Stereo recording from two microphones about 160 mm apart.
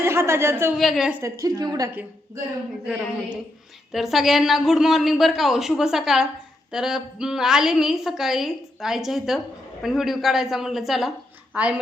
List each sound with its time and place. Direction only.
0.0 s a woman's voice: 15° right (ahead or behind)
0.8 s a woman's voice: centre (ahead or behind)
1.2 s a woman's voice: 20° right (ahead or behind)
1.9 s a woman's voice: 10° right (ahead or behind)